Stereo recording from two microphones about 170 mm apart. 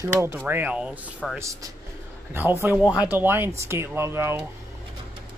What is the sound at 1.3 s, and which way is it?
Speech, 20° right (ahead or behind).